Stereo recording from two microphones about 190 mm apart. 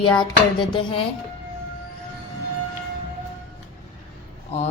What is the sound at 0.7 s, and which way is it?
Speech, 25° left (ahead or behind).